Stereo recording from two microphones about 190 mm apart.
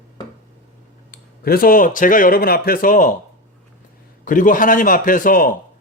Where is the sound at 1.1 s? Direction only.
50° left (ahead or behind).